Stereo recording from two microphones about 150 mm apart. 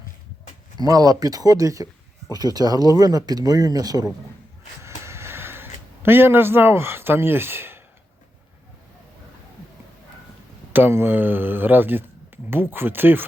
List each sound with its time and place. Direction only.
0.8 s speech: 25° right (ahead or behind)
4.8 s a sound: 20° right (ahead or behind)
10.7 s speech: 15° right (ahead or behind)